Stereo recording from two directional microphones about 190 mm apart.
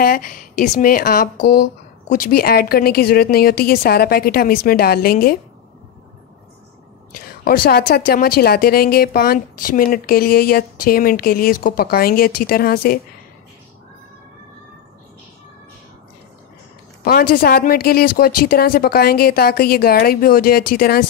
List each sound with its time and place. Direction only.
0.0 s a woman's voice: 50° left (ahead or behind)
7.1 s a woman's voice: 50° left (ahead or behind)
17.0 s a woman's voice: 50° left (ahead or behind)